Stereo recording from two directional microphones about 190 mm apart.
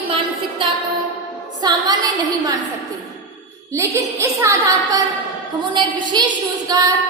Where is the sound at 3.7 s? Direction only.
15° right (ahead or behind).